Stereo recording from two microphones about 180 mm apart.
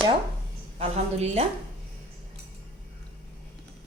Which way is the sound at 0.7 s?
35° right (ahead or behind).